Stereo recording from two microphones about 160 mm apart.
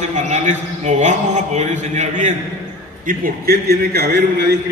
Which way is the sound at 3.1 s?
70° right (ahead or behind).